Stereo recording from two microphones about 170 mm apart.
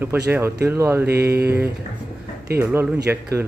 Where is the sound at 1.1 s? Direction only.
70° right (ahead or behind).